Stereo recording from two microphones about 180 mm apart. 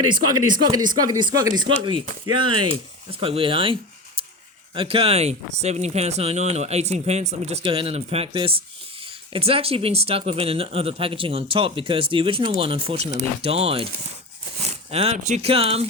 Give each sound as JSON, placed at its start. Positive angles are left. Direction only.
{"t": 0.0, "sound": "speech", "side_deg": -25}